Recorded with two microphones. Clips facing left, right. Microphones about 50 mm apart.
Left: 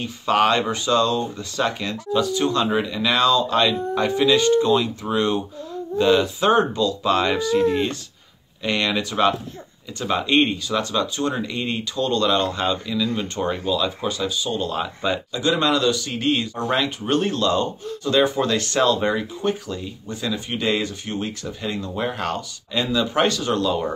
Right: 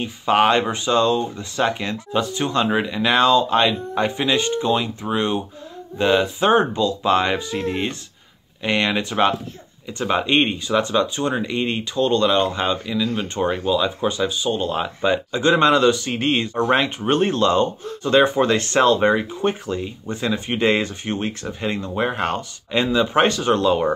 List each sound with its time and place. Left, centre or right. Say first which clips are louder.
0.0 s speech: right 2 dB; right
15.3 s speech: right 5 dB; right